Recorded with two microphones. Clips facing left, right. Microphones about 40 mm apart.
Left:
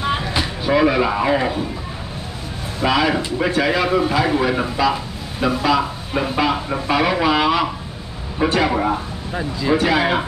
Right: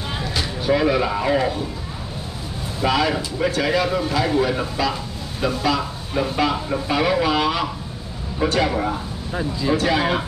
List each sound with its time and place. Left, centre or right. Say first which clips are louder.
0.0 s music: left 5 dB; left
2.8 s speech: left 2 dB; centre
3.2 s speech: left 3 dB; left